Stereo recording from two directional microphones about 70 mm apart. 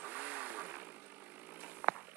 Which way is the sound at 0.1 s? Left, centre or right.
Right.